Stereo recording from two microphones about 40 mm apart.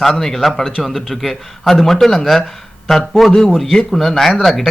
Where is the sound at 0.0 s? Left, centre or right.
Centre.